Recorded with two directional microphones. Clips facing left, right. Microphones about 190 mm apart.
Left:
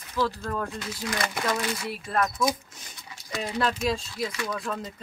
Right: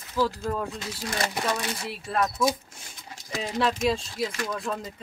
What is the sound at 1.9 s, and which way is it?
Speech, centre (ahead or behind).